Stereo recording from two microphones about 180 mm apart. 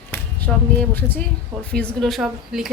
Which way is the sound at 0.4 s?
10° left (ahead or behind).